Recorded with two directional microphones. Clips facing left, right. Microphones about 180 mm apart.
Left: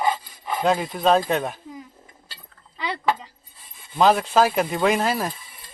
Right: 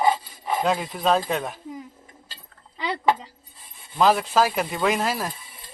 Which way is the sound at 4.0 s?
Centre (ahead or behind).